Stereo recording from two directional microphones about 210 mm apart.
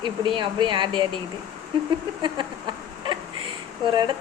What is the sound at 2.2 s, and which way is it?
Chicken, 20° right (ahead or behind).